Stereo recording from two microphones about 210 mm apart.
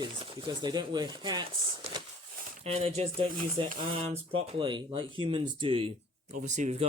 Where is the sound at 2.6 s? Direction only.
30° right (ahead or behind).